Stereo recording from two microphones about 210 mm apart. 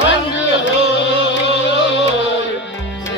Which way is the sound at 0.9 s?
55° left (ahead or behind).